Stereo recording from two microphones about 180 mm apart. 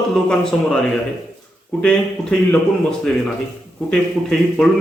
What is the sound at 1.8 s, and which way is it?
Speech, 5° left (ahead or behind).